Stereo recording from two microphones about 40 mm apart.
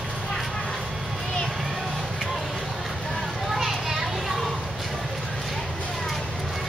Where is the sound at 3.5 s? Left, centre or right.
Centre.